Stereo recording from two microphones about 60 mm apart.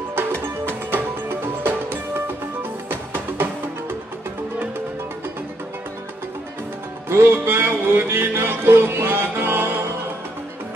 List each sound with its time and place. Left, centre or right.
0.9 s music: right
3.4 s music: right
7.1 s music: right